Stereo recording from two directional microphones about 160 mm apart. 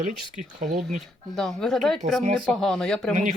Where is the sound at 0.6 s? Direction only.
55° right (ahead or behind).